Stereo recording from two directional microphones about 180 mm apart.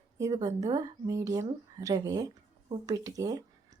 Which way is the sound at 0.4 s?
20° right (ahead or behind).